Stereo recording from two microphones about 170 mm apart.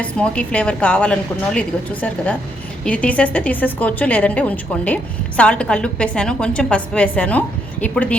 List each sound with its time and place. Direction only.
0.0 s a woman's voice: 5° left (ahead or behind)